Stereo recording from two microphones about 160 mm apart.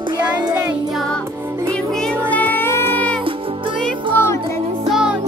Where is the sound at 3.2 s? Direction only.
30° right (ahead or behind).